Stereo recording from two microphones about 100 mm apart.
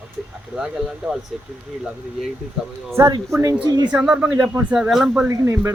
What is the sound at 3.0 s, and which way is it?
Speech, 35° right (ahead or behind).